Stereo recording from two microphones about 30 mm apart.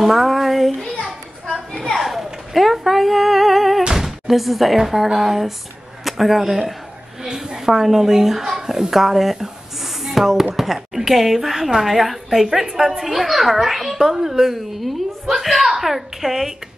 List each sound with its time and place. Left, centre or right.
0.0 s a sound: centre
2.0 s speech: centre
3.9 s a sound: centre
4.8 s a woman's voice: centre
7.2 s a woman's voice: right
8.9 s a woman's voice: centre
14.4 s a woman's voice: centre